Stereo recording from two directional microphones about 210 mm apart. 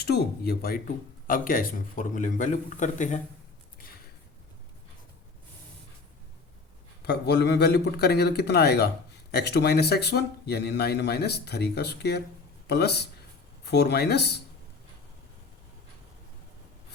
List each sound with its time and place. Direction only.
0.0 s a man's voice: 50° left (ahead or behind)
7.0 s a man's voice: 50° left (ahead or behind)